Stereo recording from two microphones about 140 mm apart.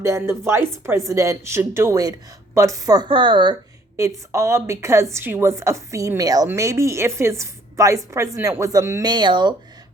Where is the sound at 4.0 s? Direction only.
20° right (ahead or behind).